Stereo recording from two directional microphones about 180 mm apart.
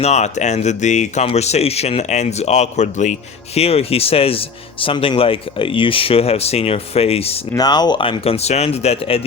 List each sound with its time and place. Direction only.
0.0 s speech: 40° left (ahead or behind)
7.5 s speech: 20° left (ahead or behind)